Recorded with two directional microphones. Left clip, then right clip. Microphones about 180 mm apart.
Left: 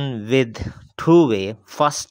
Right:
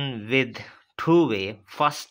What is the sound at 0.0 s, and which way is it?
Speech, 50° left (ahead or behind).